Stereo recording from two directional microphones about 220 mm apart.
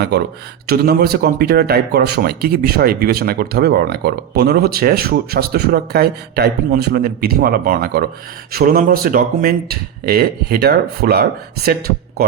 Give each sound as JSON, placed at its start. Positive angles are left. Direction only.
{"t": 0.1, "sound": "speech", "side_deg": -50}